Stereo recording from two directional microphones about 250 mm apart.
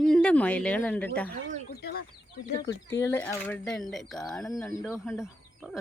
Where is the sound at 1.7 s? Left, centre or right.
Left.